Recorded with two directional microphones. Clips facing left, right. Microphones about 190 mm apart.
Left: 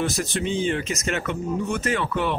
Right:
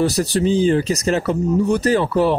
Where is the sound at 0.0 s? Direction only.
35° right (ahead or behind).